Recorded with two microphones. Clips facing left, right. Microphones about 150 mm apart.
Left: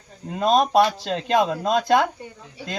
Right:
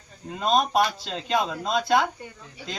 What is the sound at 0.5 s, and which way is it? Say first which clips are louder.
Speech: left 4 dB; 45° left (ahead or behind).